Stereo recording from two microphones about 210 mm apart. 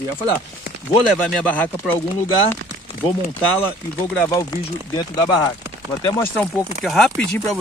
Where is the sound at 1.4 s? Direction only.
5° left (ahead or behind).